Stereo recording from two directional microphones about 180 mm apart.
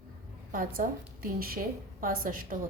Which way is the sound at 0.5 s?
50° right (ahead or behind).